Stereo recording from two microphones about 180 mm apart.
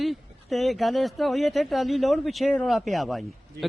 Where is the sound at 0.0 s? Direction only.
Centre (ahead or behind).